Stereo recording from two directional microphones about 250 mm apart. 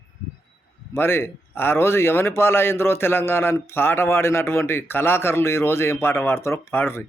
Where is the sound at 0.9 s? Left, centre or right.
Centre.